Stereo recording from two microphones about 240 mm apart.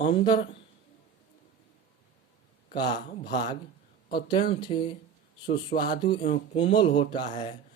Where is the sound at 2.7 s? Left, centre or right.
Centre.